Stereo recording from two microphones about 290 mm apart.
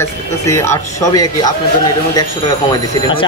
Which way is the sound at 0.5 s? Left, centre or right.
Centre.